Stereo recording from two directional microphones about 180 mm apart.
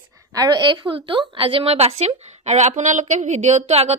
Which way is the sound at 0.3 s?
20° right (ahead or behind).